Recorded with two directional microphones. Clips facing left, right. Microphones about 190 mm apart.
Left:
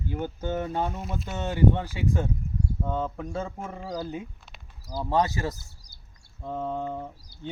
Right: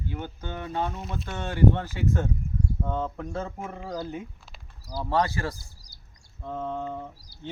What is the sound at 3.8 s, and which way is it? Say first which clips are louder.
Speech: left 1 dB; 10° left (ahead or behind).